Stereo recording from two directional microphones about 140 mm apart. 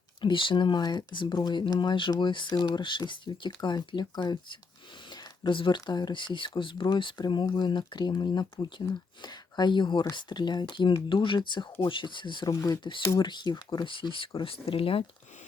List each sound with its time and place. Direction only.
0.2 s speech: 35° left (ahead or behind)
5.1 s a sound: 35° left (ahead or behind)
5.8 s speech: 30° left (ahead or behind)
12.5 s speech: 20° left (ahead or behind); by 15.0 s 40° left (ahead or behind)